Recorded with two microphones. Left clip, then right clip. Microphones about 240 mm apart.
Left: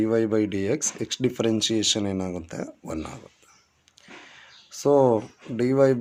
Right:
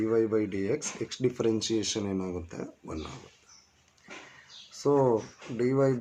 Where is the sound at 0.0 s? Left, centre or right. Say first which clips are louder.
Left 4 dB; left.